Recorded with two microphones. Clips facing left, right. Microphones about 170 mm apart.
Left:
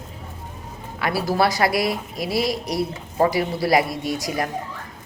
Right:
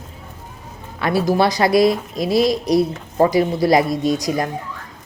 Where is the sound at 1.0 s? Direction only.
20° right (ahead or behind).